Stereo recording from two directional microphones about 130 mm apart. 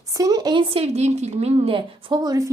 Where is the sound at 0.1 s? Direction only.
25° right (ahead or behind).